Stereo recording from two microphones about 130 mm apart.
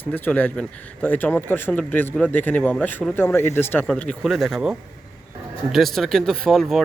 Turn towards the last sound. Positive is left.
turn(degrees=0)  # may be behind; listen again after turning